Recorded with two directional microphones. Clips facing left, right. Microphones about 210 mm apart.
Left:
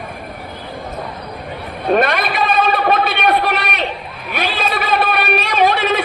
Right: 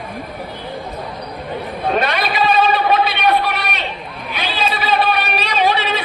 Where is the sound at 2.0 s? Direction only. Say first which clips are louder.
Left 2 dB; 50° left (ahead or behind).